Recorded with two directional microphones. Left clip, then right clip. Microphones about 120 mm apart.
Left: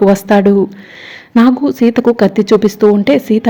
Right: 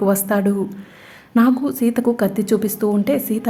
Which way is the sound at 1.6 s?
25° left (ahead or behind).